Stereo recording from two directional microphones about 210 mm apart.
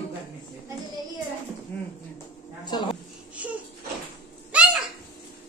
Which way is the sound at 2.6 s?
20° left (ahead or behind).